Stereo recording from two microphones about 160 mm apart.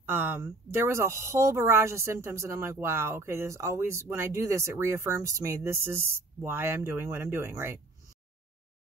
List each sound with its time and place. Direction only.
0.0 s speech: 15° right (ahead or behind)